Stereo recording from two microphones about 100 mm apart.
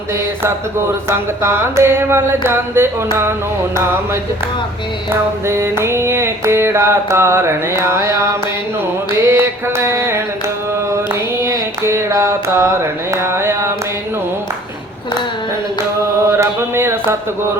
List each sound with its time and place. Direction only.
1.4 s carnatic music: 25° right (ahead or behind)
5.5 s carnatic music: 25° right (ahead or behind)
16.4 s carnatic music: 25° right (ahead or behind)